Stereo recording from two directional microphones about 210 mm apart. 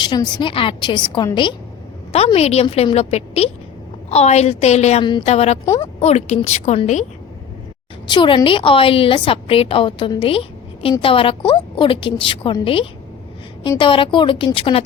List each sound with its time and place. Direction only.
0.0 s a woman's voice: 20° left (ahead or behind)
5.6 s speech: 15° left (ahead or behind)
6.0 s a woman's voice: 30° left (ahead or behind)
8.0 s a woman's voice: 20° left (ahead or behind)